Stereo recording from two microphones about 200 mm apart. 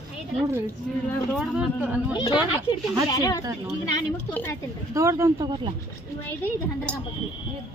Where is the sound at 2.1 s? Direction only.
20° left (ahead or behind).